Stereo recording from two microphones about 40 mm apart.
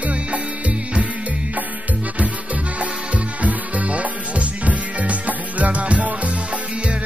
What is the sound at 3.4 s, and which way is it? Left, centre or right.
Music, right.